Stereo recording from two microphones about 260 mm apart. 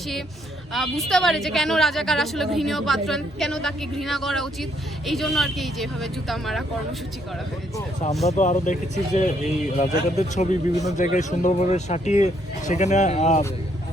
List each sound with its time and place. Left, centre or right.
0.7 s speech: centre
8.3 s speech: left